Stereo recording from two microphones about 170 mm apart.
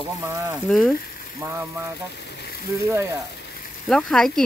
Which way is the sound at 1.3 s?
15° right (ahead or behind).